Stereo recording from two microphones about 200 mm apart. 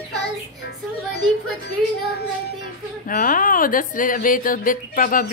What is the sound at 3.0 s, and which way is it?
A woman's voice, 45° left (ahead or behind).